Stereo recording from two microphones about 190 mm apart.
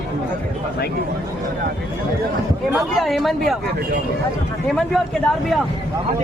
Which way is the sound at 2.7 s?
Centre (ahead or behind).